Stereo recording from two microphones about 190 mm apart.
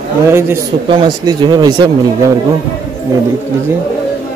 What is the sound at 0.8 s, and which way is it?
Speech, 25° right (ahead or behind).